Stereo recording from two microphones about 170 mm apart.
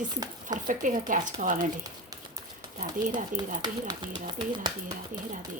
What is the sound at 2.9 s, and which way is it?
Speech, 50° right (ahead or behind).